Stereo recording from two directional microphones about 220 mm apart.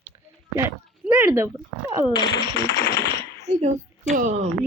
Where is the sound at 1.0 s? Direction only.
10° right (ahead or behind).